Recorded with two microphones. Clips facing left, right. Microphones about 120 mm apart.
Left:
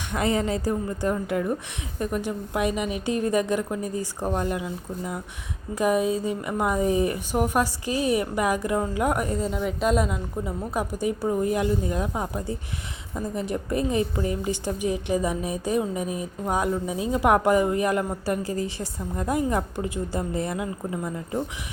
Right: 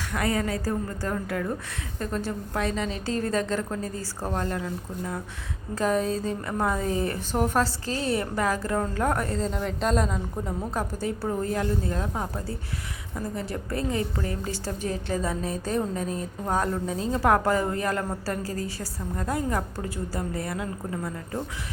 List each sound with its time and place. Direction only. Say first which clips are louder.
0.1 s a woman's voice: left 3 dB; 20° left (ahead or behind)